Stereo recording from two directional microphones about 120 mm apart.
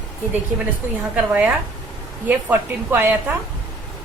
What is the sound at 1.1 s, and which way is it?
A woman's voice, 10° right (ahead or behind).